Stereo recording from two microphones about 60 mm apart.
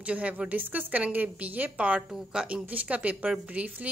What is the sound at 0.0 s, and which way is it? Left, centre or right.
A woman's voice, right.